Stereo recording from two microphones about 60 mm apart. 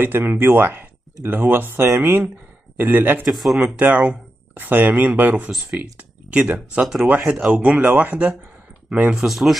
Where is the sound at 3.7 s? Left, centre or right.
Right.